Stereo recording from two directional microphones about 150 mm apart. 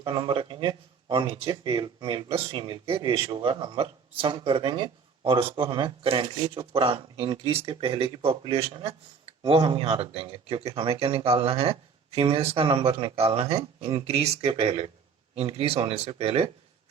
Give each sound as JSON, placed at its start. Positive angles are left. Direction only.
{"t": 0.0, "sound": "speech", "side_deg": -35}